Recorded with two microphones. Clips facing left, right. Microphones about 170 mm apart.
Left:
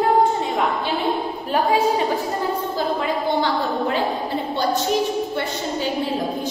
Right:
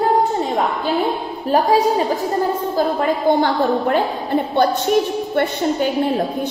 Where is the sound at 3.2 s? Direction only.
50° right (ahead or behind).